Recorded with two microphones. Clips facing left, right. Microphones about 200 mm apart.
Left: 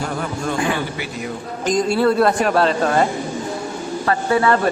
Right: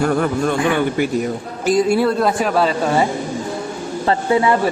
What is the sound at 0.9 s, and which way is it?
Speech, 50° right (ahead or behind).